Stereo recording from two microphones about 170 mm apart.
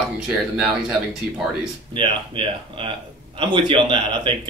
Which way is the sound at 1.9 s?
30° right (ahead or behind).